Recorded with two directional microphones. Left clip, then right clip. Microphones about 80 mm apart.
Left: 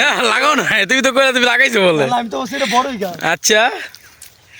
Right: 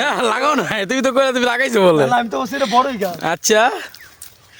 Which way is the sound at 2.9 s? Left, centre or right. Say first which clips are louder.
Right 1 dB; centre.